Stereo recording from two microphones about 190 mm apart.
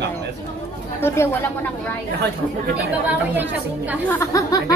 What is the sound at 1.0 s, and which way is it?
Speech, 15° left (ahead or behind).